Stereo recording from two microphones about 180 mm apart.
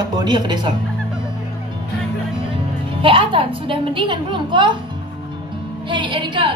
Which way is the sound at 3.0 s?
30° right (ahead or behind).